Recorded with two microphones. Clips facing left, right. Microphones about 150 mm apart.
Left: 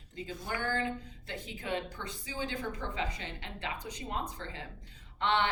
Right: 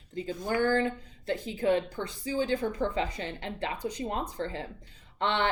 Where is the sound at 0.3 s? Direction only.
40° right (ahead or behind).